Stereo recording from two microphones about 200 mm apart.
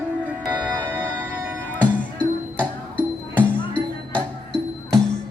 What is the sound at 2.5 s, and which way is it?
Music, 10° left (ahead or behind).